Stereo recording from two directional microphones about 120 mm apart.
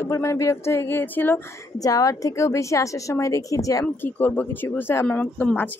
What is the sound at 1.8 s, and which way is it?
Speech, 30° left (ahead or behind).